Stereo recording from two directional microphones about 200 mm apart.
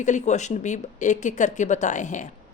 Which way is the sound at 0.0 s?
35° left (ahead or behind).